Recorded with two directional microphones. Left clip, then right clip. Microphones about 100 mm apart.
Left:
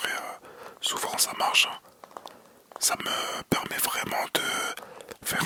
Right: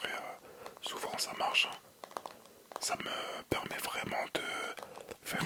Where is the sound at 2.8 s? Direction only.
35° left (ahead or behind).